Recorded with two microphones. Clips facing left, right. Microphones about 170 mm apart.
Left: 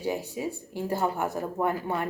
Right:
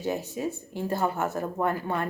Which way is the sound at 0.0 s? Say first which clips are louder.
Right 1 dB; 15° left (ahead or behind).